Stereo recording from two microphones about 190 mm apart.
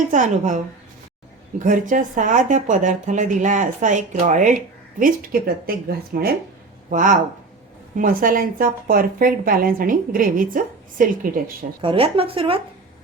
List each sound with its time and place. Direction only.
0.1 s a woman's voice: 40° right (ahead or behind)
6.9 s a woman's voice: 45° right (ahead or behind)
11.8 s speech: 30° right (ahead or behind)